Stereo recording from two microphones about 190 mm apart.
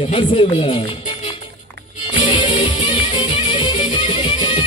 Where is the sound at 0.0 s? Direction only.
30° left (ahead or behind).